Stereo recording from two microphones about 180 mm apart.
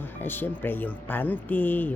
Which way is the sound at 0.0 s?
10° left (ahead or behind).